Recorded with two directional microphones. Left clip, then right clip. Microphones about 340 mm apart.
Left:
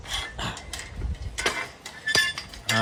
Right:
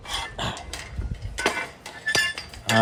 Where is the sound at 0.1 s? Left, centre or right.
Centre.